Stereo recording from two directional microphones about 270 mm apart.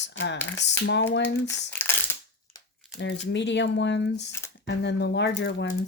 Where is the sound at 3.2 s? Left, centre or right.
Left.